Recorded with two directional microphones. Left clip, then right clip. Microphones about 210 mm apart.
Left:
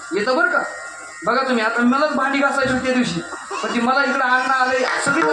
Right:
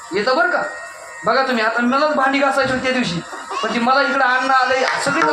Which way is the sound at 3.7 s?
40° right (ahead or behind).